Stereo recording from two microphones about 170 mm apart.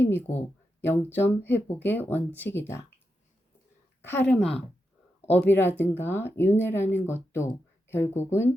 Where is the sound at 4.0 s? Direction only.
10° left (ahead or behind).